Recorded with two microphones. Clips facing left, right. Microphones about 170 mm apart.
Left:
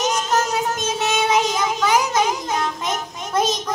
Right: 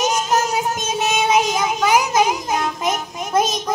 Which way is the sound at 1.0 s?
15° right (ahead or behind).